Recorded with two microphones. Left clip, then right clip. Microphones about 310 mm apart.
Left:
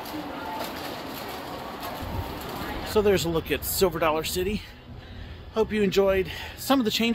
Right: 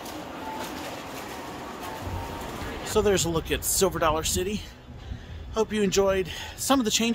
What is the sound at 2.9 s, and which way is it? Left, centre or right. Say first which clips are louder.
Speech: left 1 dB; centre.